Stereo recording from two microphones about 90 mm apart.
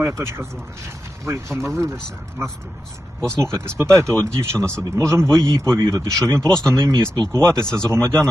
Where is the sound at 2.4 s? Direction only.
30° right (ahead or behind).